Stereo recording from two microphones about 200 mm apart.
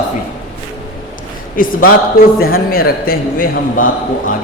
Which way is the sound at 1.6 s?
45° left (ahead or behind).